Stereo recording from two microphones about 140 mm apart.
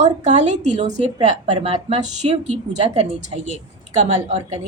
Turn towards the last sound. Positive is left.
turn(degrees=-55)  # may be behind; listen again after turning